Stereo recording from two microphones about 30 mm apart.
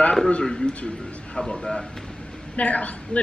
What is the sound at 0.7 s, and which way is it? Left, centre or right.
Speech, left.